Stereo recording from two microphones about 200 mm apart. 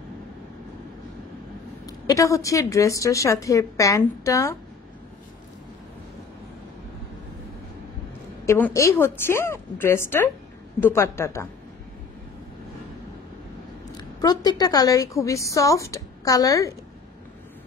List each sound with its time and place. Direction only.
1.9 s a woman's voice: 15° left (ahead or behind)
8.5 s a woman's voice: 10° left (ahead or behind)
13.9 s a woman's voice: 20° left (ahead or behind)